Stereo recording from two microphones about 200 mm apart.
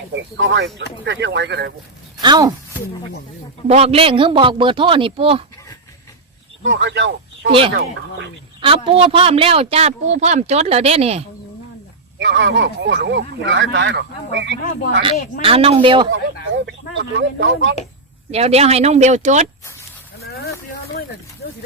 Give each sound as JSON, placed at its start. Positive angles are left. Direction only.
{"t": 0.1, "sound": "speech", "side_deg": -65}
{"t": 2.2, "sound": "speech", "side_deg": -20}
{"t": 3.7, "sound": "a man's voice", "side_deg": -30}
{"t": 6.6, "sound": "speech", "side_deg": -65}
{"t": 8.6, "sound": "speech", "side_deg": -30}
{"t": 12.2, "sound": "speech", "side_deg": -65}
{"t": 15.4, "sound": "a man's voice", "side_deg": -30}
{"t": 16.6, "sound": "speech", "side_deg": -60}
{"t": 18.3, "sound": "speech", "side_deg": -30}